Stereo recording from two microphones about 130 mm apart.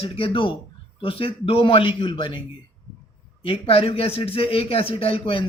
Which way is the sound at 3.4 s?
50° left (ahead or behind).